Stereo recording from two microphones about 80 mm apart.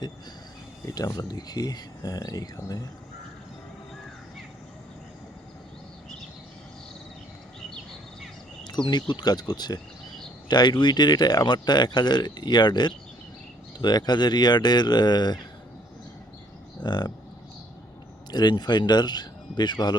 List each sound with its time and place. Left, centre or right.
0.9 s speech: left
8.6 s speech: left
16.8 s speech: left
18.3 s speech: left